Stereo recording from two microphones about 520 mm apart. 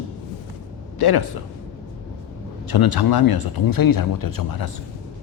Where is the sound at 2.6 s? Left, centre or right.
Left.